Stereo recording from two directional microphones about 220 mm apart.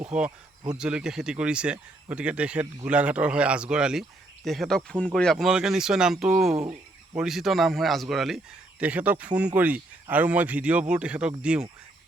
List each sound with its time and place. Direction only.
0.3 s speech: 15° right (ahead or behind)
0.8 s speech: 5° right (ahead or behind)
6.6 s a sound: 25° right (ahead or behind)
7.2 s speech: centre (ahead or behind)